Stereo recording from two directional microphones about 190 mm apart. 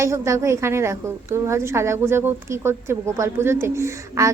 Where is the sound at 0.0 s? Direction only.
15° right (ahead or behind).